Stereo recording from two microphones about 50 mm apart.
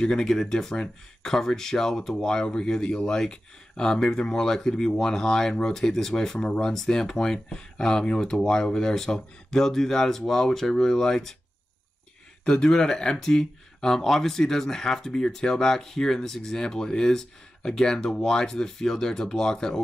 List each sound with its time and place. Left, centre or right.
0.0 s speech: centre
12.4 s speech: centre